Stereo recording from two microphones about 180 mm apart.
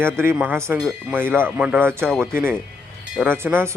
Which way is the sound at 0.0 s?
15° right (ahead or behind).